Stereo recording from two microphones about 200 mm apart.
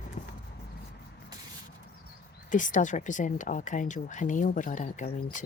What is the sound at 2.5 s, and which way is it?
Speech, 40° left (ahead or behind).